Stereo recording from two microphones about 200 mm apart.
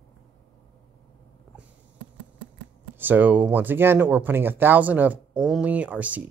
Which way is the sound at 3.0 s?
10° right (ahead or behind).